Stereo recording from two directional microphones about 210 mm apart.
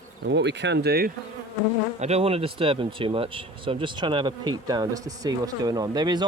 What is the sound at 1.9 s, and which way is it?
Speech, 30° right (ahead or behind).